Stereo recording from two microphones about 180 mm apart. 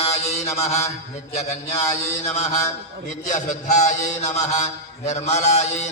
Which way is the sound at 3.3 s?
45° left (ahead or behind).